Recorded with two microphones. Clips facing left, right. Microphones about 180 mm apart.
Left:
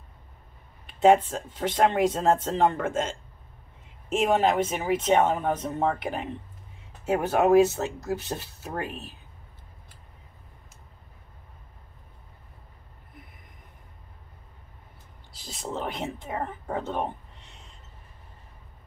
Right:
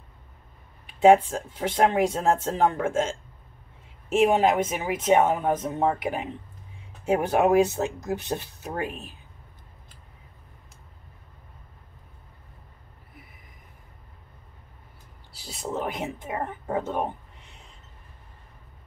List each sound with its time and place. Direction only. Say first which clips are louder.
0.8 s speech: right 2 dB; 10° right (ahead or behind)
15.3 s speech: right 2 dB; 5° right (ahead or behind)